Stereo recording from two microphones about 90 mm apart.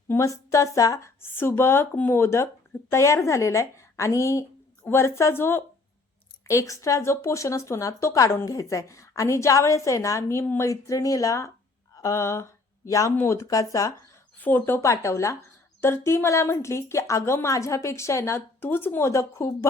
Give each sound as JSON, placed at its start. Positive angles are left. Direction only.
{"t": 0.1, "sound": "a woman's voice", "side_deg": 35}
{"t": 6.5, "sound": "a woman's voice", "side_deg": 35}
{"t": 14.4, "sound": "a woman's voice", "side_deg": 25}